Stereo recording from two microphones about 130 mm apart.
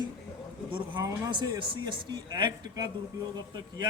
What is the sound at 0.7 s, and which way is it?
A man's voice, 40° right (ahead or behind).